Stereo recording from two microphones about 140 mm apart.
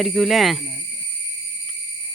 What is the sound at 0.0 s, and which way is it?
Speech, centre (ahead or behind).